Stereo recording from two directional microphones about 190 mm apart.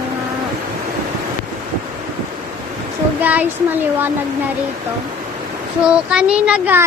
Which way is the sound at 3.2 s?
10° right (ahead or behind).